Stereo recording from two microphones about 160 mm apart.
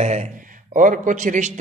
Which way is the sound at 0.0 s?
45° right (ahead or behind).